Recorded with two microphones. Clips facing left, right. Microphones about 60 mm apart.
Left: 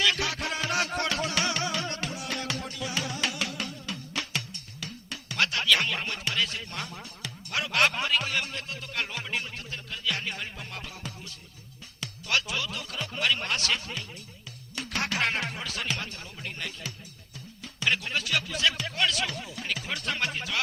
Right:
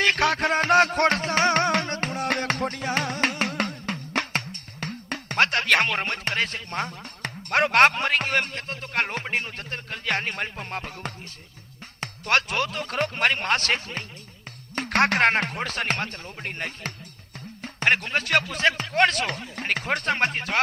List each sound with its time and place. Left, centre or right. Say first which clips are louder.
0.0 s music: right 6 dB; right
11.9 s speech: right 6 dB; right